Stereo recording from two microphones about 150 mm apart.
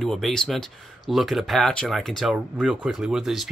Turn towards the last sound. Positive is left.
turn(degrees=0)  # may be behind; listen again after turning